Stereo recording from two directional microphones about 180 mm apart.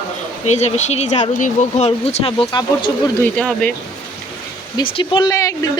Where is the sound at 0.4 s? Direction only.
40° left (ahead or behind).